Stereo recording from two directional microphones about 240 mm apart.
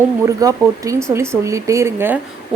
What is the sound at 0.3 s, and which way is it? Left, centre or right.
A woman's voice, centre.